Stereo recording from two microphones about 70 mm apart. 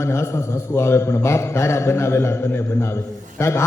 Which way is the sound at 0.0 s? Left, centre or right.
Left.